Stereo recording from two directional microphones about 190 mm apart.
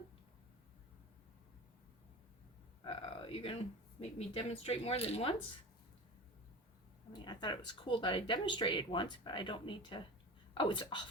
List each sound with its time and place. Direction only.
2.8 s a sound: 30° left (ahead or behind)
4.4 s speech: 30° left (ahead or behind)
7.3 s speech: 25° left (ahead or behind)